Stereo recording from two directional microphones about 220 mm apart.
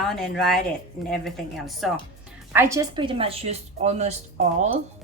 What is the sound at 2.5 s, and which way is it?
A woman's voice, 15° right (ahead or behind).